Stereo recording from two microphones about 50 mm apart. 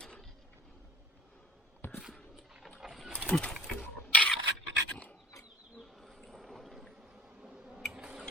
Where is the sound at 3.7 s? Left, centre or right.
Left.